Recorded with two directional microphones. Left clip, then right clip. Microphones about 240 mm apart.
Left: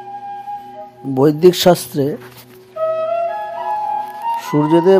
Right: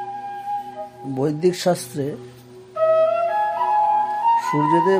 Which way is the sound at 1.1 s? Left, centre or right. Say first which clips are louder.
Left 9 dB; left.